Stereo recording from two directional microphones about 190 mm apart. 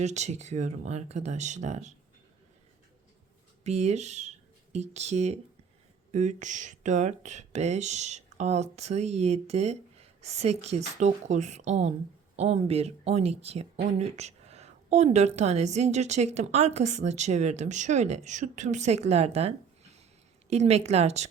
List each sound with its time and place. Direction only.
0.0 s a woman's voice: 35° right (ahead or behind)
3.6 s a woman's voice: 35° right (ahead or behind)